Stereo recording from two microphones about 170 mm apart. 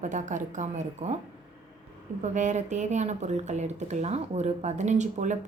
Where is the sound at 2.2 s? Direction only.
45° right (ahead or behind).